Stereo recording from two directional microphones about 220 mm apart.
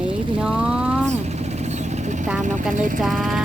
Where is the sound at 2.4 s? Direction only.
35° right (ahead or behind).